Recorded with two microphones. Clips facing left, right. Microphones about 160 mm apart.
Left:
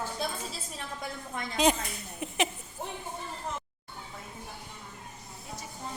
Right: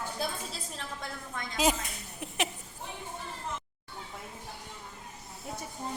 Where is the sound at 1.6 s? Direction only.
5° right (ahead or behind).